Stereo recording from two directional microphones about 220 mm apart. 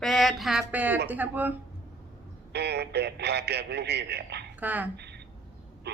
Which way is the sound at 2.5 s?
50° right (ahead or behind).